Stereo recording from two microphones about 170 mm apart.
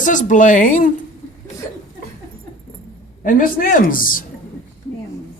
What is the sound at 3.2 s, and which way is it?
Speech, 55° left (ahead or behind).